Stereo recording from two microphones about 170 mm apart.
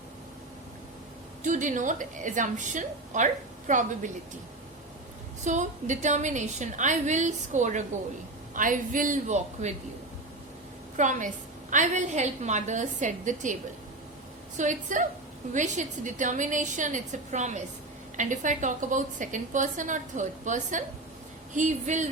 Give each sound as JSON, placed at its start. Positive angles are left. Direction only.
{"t": 1.5, "sound": "a woman's voice", "side_deg": -50}
{"t": 5.4, "sound": "a woman's voice", "side_deg": -45}
{"t": 10.9, "sound": "a woman's voice", "side_deg": -45}